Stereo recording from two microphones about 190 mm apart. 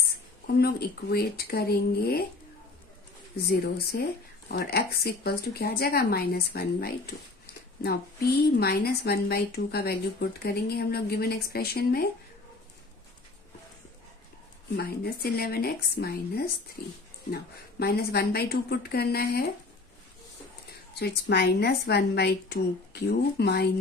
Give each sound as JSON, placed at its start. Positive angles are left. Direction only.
{"t": 0.4, "sound": "speech", "side_deg": 55}
{"t": 3.4, "sound": "speech", "side_deg": 55}
{"t": 14.8, "sound": "speech", "side_deg": 55}
{"t": 21.0, "sound": "speech", "side_deg": 60}